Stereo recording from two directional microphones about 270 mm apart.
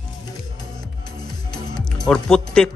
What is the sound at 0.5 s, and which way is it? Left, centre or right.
Music, left.